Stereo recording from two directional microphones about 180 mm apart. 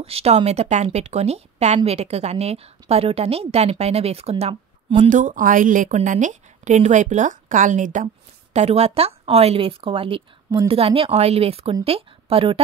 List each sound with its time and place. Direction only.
0.0 s a woman's voice: 35° right (ahead or behind)